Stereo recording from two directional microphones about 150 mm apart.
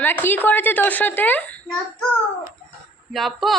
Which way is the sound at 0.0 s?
15° left (ahead or behind).